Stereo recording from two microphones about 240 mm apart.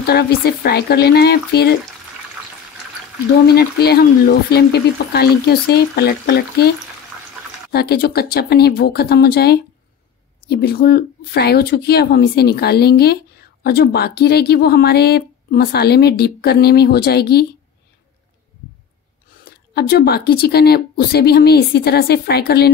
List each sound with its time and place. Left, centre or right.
0.0 s speech: left
3.4 s speech: left
7.7 s speech: left
19.7 s speech: left